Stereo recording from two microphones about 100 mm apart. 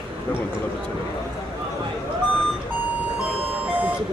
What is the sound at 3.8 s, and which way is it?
Ice cream truck, 15° right (ahead or behind).